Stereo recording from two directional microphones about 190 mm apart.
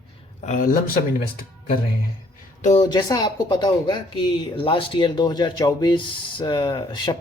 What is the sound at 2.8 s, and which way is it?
Speech, 20° left (ahead or behind).